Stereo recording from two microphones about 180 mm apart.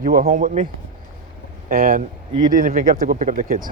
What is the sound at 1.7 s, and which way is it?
Speech, 50° right (ahead or behind).